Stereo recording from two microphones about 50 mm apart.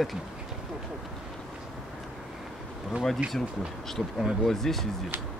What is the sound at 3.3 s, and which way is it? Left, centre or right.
Speech, centre.